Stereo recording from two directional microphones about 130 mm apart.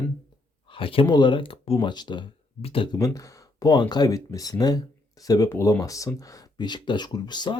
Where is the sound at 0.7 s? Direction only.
45° left (ahead or behind).